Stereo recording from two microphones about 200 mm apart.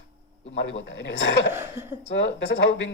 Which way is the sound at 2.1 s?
65° left (ahead or behind).